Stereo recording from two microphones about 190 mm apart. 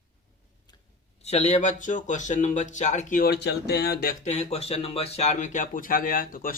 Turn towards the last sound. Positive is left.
turn(degrees=45)  # may be behind; listen again after turning